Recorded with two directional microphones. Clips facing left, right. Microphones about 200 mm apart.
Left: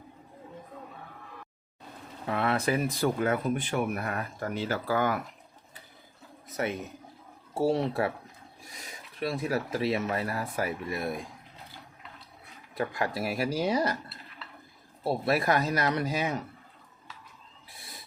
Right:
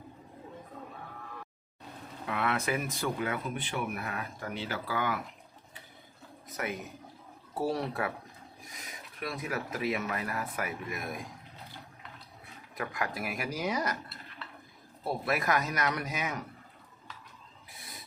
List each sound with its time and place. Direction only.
2.2 s speech: 35° left (ahead or behind)
6.5 s a sound: 25° left (ahead or behind)
7.5 s speech: 25° left (ahead or behind)
12.7 s speech: 30° left (ahead or behind)
15.0 s speech: 30° left (ahead or behind)